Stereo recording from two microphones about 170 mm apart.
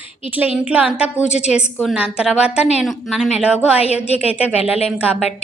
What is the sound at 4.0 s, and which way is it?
Speech, 10° right (ahead or behind).